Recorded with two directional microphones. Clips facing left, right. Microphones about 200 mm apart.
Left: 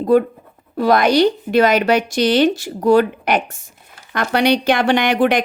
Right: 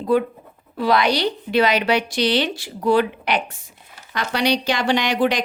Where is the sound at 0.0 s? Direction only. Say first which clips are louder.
Left 5 dB; 45° left (ahead or behind).